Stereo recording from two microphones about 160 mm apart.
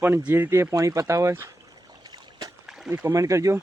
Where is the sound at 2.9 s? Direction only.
20° right (ahead or behind).